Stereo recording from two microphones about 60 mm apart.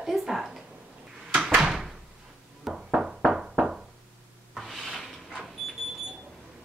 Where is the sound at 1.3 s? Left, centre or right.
Centre.